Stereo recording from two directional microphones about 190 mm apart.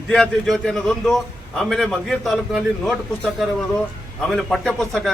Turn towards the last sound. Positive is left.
turn(degrees=5)  # may be behind; listen again after turning